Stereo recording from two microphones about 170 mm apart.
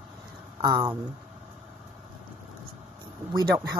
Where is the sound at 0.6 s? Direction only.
25° right (ahead or behind).